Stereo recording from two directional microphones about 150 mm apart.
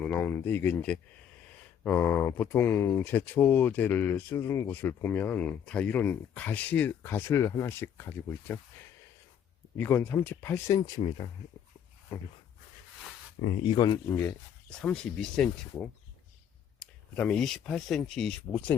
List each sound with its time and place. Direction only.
0.0 s speech: 15° left (ahead or behind)
9.7 s speech: 15° left (ahead or behind); by 11.3 s 35° left (ahead or behind)
12.1 s speech: 20° left (ahead or behind)
13.7 s speech: 30° left (ahead or behind)
14.7 s speech: 5° left (ahead or behind)